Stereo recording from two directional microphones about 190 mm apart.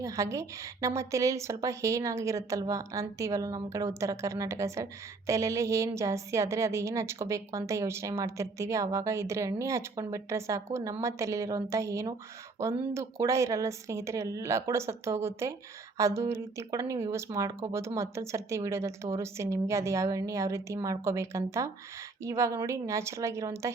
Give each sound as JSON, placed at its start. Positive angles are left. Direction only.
{"t": 0.0, "sound": "a woman's voice", "side_deg": -15}